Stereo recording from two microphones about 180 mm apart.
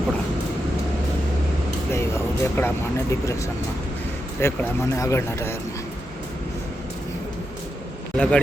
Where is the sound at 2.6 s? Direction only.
15° left (ahead or behind).